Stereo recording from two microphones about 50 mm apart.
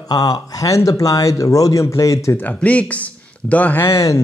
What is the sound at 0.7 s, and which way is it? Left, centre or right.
Speech, left.